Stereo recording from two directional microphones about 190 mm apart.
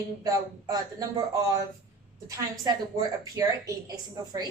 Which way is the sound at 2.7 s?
20° right (ahead or behind).